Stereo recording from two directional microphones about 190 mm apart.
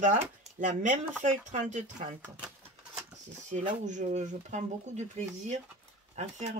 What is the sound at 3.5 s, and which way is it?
Speech, 40° right (ahead or behind).